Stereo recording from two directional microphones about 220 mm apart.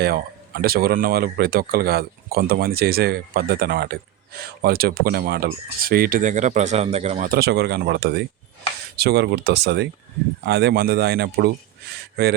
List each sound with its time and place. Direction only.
0.0 s speech: 45° right (ahead or behind); by 7.3 s 30° right (ahead or behind)
7.3 s speech: 45° right (ahead or behind)